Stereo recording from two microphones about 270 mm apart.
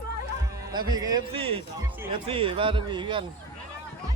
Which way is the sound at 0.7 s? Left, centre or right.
Centre.